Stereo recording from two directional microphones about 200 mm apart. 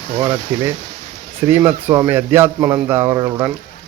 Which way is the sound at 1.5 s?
10° right (ahead or behind).